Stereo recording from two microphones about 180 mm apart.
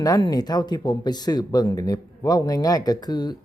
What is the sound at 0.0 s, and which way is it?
Speech, 20° left (ahead or behind).